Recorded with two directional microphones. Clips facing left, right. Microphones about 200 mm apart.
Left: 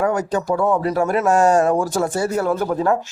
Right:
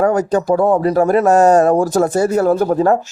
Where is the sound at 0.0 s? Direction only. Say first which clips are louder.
Right 5 dB; 40° right (ahead or behind).